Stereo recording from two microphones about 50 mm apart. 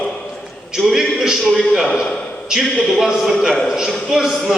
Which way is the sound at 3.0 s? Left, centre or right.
Centre.